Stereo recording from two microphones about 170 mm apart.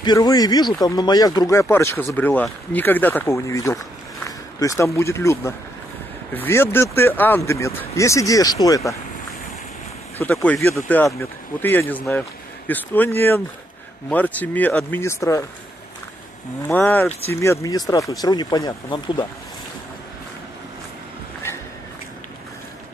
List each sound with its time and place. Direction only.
0.0 s speech: 25° left (ahead or behind)
10.2 s speech: 10° left (ahead or behind)
16.6 s speech: 15° left (ahead or behind)